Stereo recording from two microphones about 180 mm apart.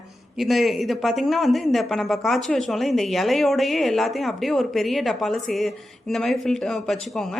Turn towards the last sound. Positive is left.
turn(degrees=0)  # may be behind; listen again after turning